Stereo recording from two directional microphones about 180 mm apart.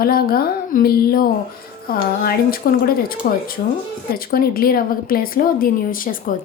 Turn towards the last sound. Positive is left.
turn(degrees=50)  # may be behind; listen again after turning